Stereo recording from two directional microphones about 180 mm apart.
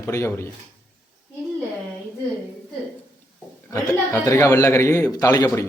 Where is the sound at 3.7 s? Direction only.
15° left (ahead or behind).